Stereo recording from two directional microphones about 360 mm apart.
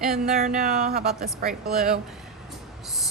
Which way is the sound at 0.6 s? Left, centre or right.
Centre.